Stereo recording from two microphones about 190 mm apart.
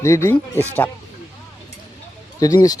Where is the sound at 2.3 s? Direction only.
20° left (ahead or behind).